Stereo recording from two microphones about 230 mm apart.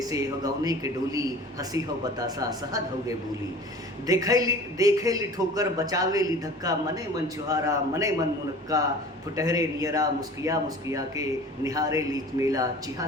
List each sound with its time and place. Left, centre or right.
0.0 s speech: centre
4.0 s speech: centre